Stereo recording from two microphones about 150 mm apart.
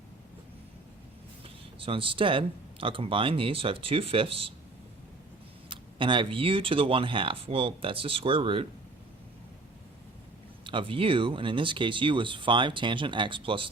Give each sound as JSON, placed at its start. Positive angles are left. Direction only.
{"t": 1.8, "sound": "speech", "side_deg": -35}
{"t": 5.6, "sound": "speech", "side_deg": -35}
{"t": 10.6, "sound": "speech", "side_deg": -35}